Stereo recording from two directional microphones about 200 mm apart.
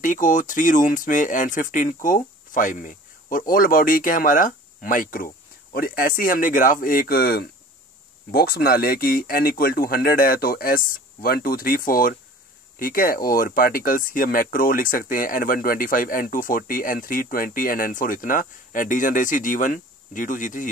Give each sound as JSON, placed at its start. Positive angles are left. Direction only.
{"t": 0.0, "sound": "speech", "side_deg": 40}